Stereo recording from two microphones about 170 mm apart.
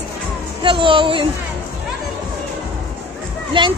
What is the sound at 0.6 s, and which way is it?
Speech, 30° right (ahead or behind).